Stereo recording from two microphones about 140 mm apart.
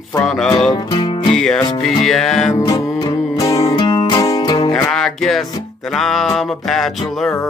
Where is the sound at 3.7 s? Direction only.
30° left (ahead or behind).